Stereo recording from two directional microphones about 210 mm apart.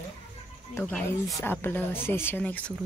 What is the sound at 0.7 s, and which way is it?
Speech, 5° left (ahead or behind).